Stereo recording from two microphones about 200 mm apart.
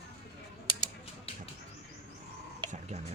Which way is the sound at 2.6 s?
25° right (ahead or behind).